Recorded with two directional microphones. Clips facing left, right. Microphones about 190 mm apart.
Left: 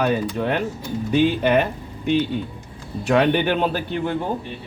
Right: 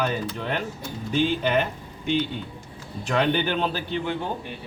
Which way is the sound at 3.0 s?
55° left (ahead or behind).